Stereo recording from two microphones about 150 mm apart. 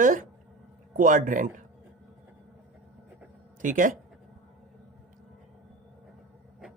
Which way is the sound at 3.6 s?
60° right (ahead or behind).